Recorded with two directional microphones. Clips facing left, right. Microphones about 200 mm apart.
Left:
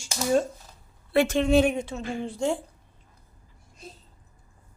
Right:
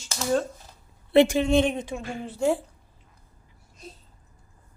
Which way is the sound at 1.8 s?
10° right (ahead or behind).